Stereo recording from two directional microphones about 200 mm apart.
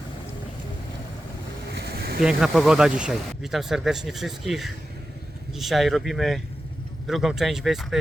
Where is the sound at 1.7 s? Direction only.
50° right (ahead or behind).